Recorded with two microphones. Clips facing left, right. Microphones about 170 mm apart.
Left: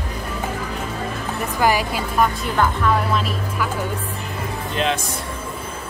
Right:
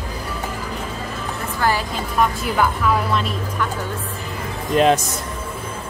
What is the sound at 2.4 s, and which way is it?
A woman's voice, 5° right (ahead or behind).